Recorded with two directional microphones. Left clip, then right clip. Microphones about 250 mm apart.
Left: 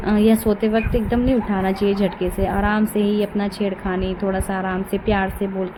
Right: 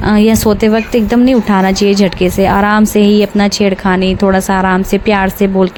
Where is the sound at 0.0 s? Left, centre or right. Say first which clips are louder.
Right 7 dB; right.